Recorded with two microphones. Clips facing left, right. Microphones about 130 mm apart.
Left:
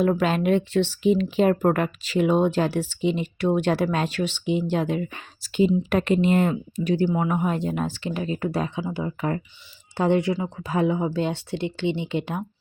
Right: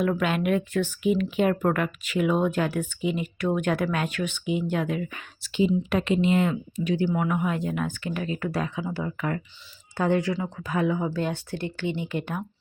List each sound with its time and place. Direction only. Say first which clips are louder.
0.0 s speech: left 3 dB; 30° left (ahead or behind)
5.5 s speech: left 3 dB; 50° left (ahead or behind); by 9.1 s 20° left (ahead or behind)
9.1 s speech: left 3 dB; 30° left (ahead or behind)